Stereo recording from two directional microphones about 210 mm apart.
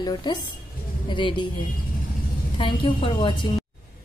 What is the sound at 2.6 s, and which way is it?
Speech, 25° left (ahead or behind).